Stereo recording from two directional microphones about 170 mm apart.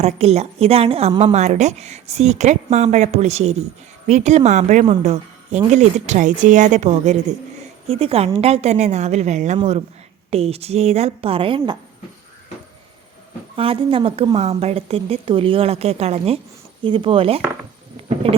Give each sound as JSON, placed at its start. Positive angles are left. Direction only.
{"t": 0.0, "sound": "a woman's voice", "side_deg": -40}
{"t": 13.6, "sound": "a woman's voice", "side_deg": -35}